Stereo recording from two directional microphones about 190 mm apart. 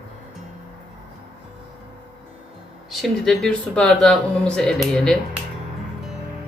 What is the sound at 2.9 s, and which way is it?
Speech, centre (ahead or behind).